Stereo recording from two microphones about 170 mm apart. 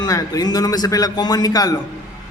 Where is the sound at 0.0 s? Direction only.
20° left (ahead or behind).